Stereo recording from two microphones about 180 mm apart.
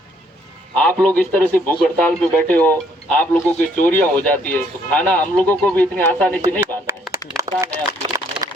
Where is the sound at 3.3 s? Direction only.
40° left (ahead or behind).